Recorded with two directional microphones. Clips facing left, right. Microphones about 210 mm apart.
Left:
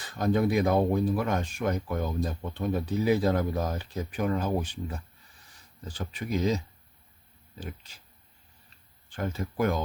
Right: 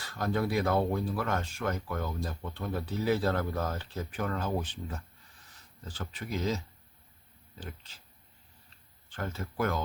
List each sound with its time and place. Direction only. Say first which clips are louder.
0.0 s speech: left 5 dB; 20° left (ahead or behind)
9.0 s speech: left 5 dB; 15° left (ahead or behind)